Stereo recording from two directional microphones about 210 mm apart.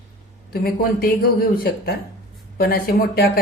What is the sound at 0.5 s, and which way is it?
Speech, 45° left (ahead or behind).